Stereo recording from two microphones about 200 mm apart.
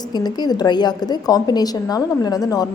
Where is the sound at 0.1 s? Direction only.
20° left (ahead or behind).